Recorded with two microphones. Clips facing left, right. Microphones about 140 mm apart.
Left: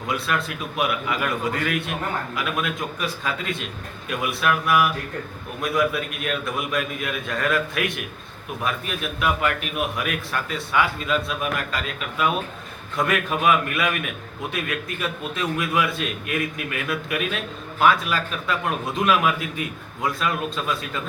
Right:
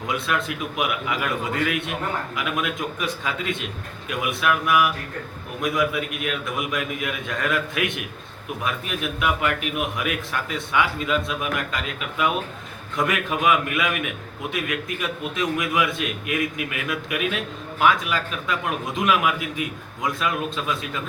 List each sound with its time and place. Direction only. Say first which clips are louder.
0.1 s a man's voice: even; 20° right (ahead or behind)